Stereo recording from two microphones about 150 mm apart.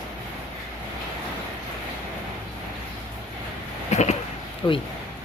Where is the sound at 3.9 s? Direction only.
50° left (ahead or behind).